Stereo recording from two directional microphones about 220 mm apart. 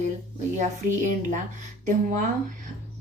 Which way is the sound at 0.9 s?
35° right (ahead or behind).